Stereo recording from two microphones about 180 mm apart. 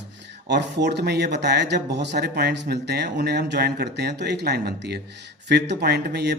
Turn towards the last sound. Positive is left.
turn(degrees=-65)  # may be behind; listen again after turning